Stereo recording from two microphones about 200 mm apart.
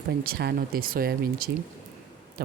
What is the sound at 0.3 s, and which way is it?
Speech, 50° right (ahead or behind).